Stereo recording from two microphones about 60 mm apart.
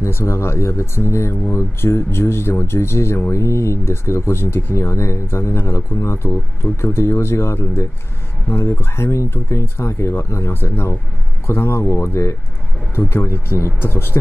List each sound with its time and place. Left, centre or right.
0.0 s speech: left
10.5 s speech: left